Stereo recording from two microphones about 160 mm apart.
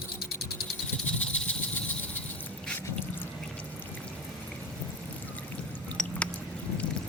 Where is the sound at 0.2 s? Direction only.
80° left.